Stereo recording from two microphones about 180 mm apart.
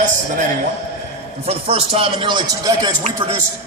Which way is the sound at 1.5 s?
35° right (ahead or behind).